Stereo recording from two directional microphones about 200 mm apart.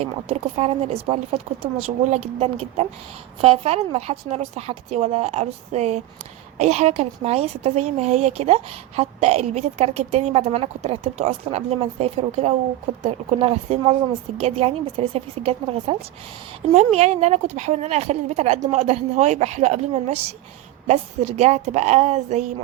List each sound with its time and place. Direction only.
0.0 s a woman's voice: 30° right (ahead or behind)